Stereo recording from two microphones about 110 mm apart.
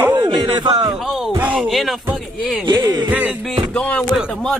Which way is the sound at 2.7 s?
40° right (ahead or behind).